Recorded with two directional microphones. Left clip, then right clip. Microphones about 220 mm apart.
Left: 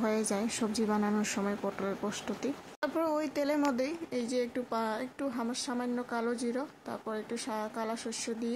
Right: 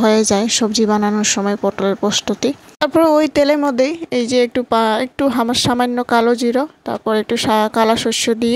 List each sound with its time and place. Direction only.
0.0 s speech: 30° right (ahead or behind)